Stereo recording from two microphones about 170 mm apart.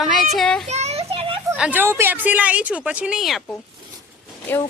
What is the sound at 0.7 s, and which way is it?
Children playing, 40° right (ahead or behind).